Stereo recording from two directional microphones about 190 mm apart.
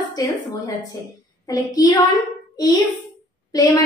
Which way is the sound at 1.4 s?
20° left (ahead or behind).